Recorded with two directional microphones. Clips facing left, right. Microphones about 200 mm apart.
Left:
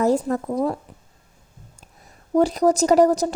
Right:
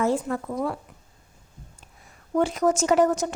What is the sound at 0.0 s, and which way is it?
Speech, 40° left (ahead or behind).